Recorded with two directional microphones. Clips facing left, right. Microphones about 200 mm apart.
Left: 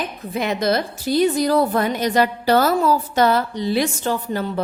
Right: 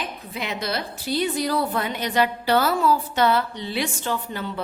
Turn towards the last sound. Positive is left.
turn(degrees=40)  # may be behind; listen again after turning